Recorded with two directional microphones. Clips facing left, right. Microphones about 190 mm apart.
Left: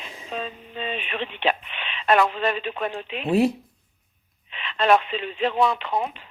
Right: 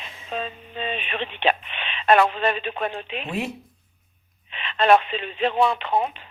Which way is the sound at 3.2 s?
35° left (ahead or behind).